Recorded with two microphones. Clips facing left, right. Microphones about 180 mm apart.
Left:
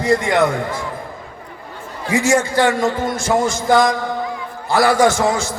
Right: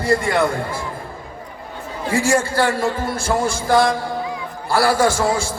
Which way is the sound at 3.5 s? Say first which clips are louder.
Right 1 dB; 30° right (ahead or behind).